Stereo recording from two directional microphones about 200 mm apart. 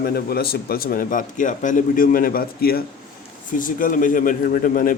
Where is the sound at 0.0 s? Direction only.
50° left (ahead or behind).